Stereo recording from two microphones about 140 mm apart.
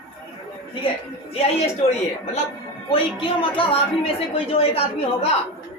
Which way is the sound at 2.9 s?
40° left (ahead or behind).